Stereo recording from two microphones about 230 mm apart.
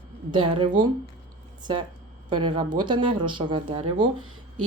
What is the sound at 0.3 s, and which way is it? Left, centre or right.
Speech, right.